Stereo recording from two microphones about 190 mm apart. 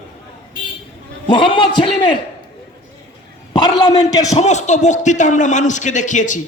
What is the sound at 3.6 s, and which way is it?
Speech, 20° left (ahead or behind).